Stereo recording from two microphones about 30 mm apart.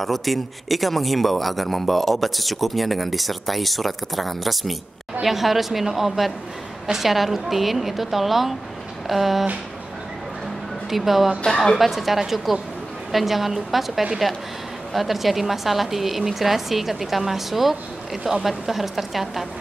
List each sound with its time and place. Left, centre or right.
0.0 s a man's voice: centre
10.9 s a woman's voice: centre
11.4 s a woman's voice: left
11.7 s a man's voice: centre